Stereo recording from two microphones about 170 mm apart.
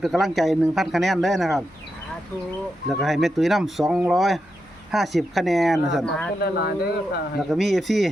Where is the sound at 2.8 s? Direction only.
Centre (ahead or behind).